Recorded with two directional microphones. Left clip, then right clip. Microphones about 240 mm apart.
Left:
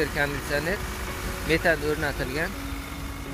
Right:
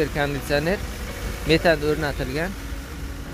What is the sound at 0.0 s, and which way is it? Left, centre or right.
Speech, centre.